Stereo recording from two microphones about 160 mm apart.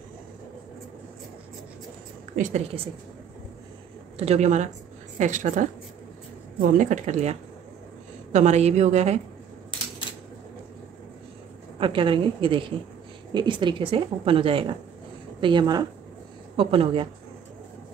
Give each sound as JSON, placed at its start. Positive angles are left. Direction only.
{"t": 2.3, "sound": "a woman's voice", "side_deg": -55}
{"t": 4.2, "sound": "a woman's voice", "side_deg": -45}
{"t": 11.8, "sound": "a woman's voice", "side_deg": -30}